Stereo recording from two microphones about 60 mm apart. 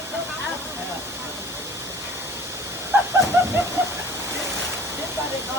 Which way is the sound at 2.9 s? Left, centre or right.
Right.